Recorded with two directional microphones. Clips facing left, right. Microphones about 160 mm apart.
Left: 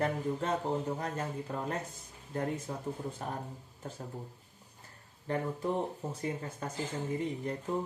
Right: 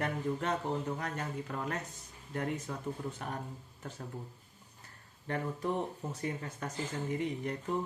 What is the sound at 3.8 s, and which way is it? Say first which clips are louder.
Speech: left 2 dB; 30° left (ahead or behind).